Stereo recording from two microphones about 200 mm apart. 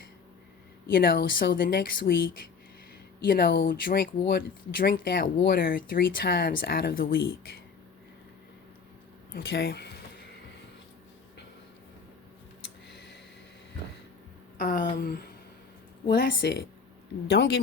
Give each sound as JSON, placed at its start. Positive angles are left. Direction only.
{"t": 0.9, "sound": "speech", "side_deg": 50}
{"t": 9.3, "sound": "speech", "side_deg": 50}
{"t": 12.9, "sound": "tick", "side_deg": 60}
{"t": 14.6, "sound": "speech", "side_deg": 50}